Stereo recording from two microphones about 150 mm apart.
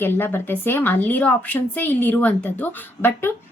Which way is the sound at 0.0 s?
15° left (ahead or behind).